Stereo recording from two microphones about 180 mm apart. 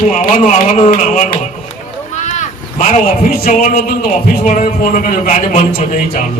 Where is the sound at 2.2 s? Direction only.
40° left (ahead or behind).